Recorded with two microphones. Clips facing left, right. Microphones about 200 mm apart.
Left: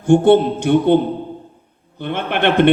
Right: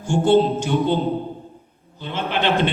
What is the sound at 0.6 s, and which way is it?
Speech, 55° left (ahead or behind).